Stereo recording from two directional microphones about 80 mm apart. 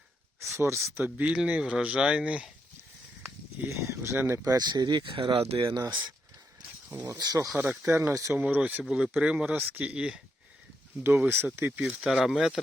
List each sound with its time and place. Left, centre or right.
0.5 s speech: right; by 2.5 s centre
3.7 s speech: right
4.4 s speech: right
5.5 s speech: right
6.9 s speech: right
7.9 s speech: right
8.4 s speech: right
8.8 s speech: centre
11.0 s speech: right
11.9 s speech: centre